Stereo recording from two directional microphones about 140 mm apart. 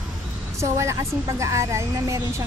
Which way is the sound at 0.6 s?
20° right (ahead or behind).